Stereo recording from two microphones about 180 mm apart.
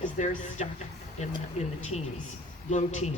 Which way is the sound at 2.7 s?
40° left (ahead or behind).